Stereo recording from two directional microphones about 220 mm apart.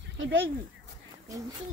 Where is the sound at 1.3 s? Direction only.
15° right (ahead or behind).